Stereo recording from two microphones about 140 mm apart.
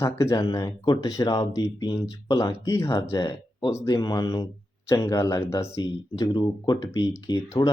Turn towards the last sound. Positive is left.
turn(degrees=25)  # may be behind; listen again after turning